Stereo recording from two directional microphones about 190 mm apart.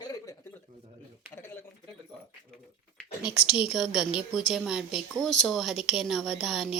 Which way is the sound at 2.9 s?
5° right (ahead or behind).